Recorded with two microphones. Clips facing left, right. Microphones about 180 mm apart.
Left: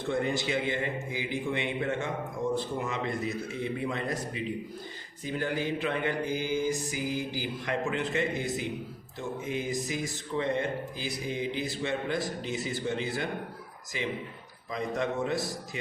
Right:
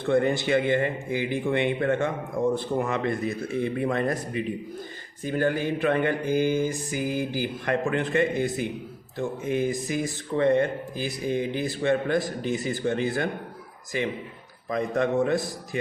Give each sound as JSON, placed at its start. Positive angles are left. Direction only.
{"t": 0.1, "sound": "a man's voice", "side_deg": -60}